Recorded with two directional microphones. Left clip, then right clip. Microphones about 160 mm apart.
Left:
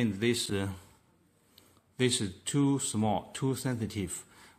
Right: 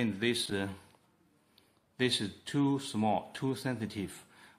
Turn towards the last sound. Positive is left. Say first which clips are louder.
# left 3 dB
turn(degrees=15)  # may be behind; listen again after turning